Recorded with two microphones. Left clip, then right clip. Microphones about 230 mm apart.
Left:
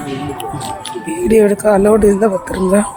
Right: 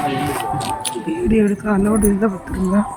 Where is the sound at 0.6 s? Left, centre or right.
Right.